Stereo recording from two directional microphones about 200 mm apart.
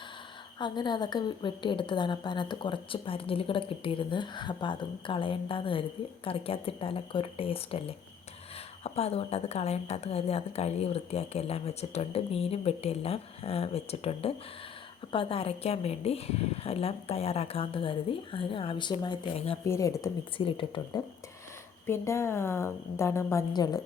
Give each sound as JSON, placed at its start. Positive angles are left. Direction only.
{"t": 0.6, "sound": "a woman's voice", "side_deg": 20}
{"t": 21.8, "sound": "a woman's voice", "side_deg": 15}